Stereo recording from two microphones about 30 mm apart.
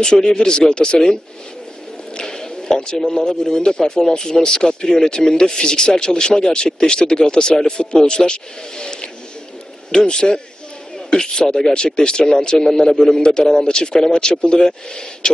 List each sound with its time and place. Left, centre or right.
0.0 s speech: left
2.1 s a sound: centre
3.5 s speech: left
12.5 s a man's voice: centre
13.2 s speech: left